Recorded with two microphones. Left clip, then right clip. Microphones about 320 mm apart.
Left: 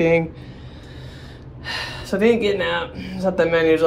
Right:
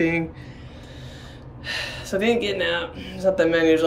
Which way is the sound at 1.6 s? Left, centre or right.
Centre.